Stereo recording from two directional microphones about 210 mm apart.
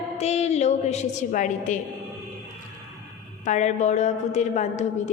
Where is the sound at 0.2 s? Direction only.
30° left (ahead or behind).